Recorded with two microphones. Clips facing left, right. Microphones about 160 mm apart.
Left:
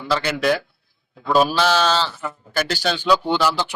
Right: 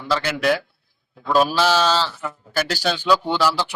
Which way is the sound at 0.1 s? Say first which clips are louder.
Even; 5° right (ahead or behind).